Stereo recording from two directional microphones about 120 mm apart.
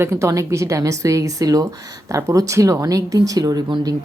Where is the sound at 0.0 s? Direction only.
25° right (ahead or behind).